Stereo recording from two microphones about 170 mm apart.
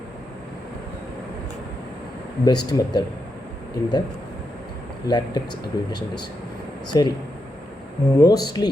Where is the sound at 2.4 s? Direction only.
25° left (ahead or behind).